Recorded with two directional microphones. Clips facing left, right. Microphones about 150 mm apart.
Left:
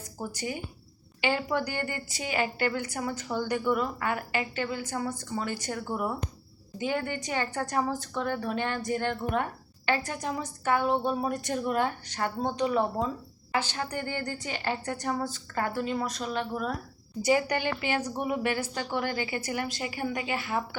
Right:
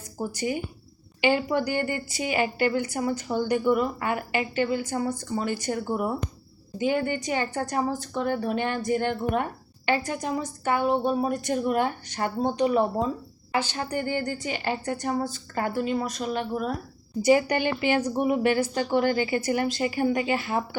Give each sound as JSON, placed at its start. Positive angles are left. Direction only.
{"t": 0.2, "sound": "a woman's voice", "side_deg": -15}